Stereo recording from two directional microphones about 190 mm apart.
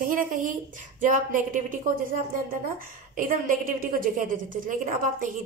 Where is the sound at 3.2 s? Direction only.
45° right (ahead or behind).